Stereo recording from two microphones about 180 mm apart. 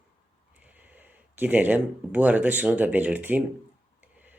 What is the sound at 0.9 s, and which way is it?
Speech, 10° right (ahead or behind).